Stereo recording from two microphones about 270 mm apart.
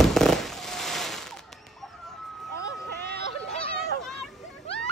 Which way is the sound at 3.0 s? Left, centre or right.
Right.